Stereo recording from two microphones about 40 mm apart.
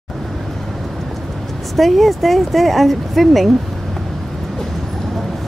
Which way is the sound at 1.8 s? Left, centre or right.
Centre.